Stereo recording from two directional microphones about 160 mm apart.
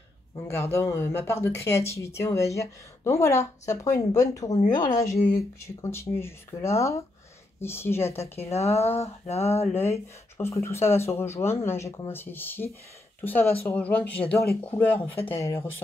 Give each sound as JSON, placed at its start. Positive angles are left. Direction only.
{"t": 0.5, "sound": "speech", "side_deg": 15}
{"t": 8.4, "sound": "a sound", "side_deg": 40}
{"t": 9.8, "sound": "speech", "side_deg": 15}